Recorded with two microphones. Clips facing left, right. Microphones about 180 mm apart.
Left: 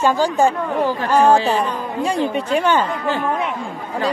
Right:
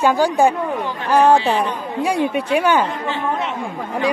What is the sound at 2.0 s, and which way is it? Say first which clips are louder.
Speech: right 1 dB; 10° right (ahead or behind).